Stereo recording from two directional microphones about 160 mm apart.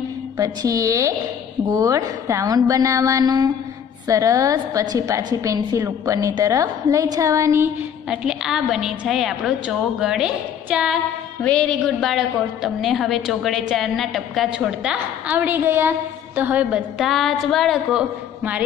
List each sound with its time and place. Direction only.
0.4 s a woman's voice: 20° right (ahead or behind)
8.1 s a woman's voice: 5° right (ahead or behind)
11.4 s a woman's voice: 5° left (ahead or behind); by 16.8 s 10° right (ahead or behind)
17.0 s a woman's voice: centre (ahead or behind)